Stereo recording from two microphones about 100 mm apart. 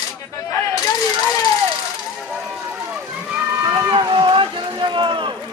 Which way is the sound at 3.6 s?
45° right (ahead or behind).